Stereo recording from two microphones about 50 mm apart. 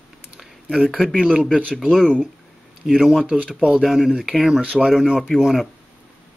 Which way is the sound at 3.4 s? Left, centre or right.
Centre.